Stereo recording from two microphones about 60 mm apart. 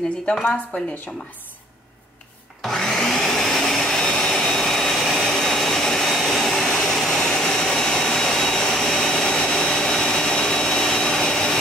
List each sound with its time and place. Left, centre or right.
0.3 s speech: centre
2.6 s vacuum cleaner: centre